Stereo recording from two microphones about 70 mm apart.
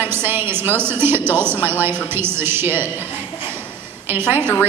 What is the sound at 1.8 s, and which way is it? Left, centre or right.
A woman's voice, right.